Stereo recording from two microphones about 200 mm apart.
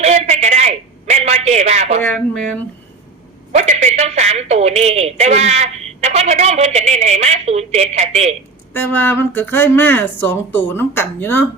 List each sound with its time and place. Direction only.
0.0 s a sound: 35° right (ahead or behind)
2.0 s speech: 5° left (ahead or behind)
3.5 s a woman's voice: 35° right (ahead or behind)
8.7 s speech: 10° left (ahead or behind)